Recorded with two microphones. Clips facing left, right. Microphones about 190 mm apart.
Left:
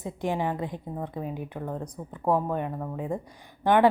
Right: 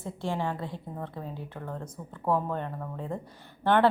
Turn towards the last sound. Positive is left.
turn(degrees=10)  # may be behind; listen again after turning